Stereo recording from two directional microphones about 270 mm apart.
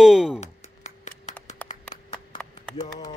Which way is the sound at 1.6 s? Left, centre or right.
Centre.